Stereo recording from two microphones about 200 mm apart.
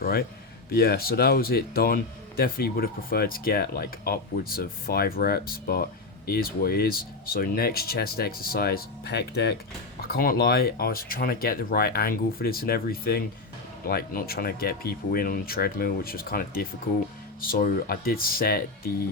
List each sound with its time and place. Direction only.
0.0 s a man's voice: 50° left (ahead or behind)